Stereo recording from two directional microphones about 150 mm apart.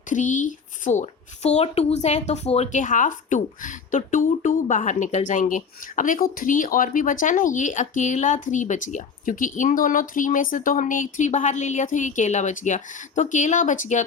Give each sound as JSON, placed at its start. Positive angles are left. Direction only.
{"t": 0.1, "sound": "speech", "side_deg": 60}